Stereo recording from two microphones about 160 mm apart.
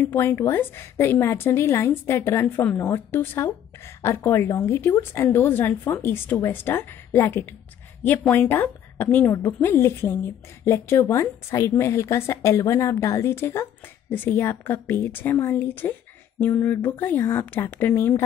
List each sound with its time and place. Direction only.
0.0 s a woman's voice: 10° left (ahead or behind)